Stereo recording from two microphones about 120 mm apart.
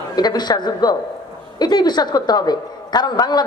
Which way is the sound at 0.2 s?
35° left (ahead or behind).